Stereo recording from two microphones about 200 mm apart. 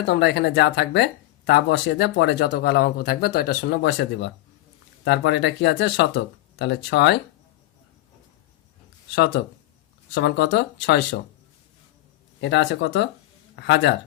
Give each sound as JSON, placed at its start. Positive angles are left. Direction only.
{"t": 0.0, "sound": "speech", "side_deg": 60}
{"t": 9.1, "sound": "speech", "side_deg": 65}
{"t": 12.4, "sound": "speech", "side_deg": 65}